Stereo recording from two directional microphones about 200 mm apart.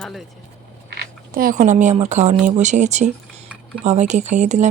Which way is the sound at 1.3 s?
45° right (ahead or behind).